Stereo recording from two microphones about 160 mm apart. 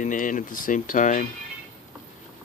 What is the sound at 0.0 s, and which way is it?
Speech, 55° left (ahead or behind).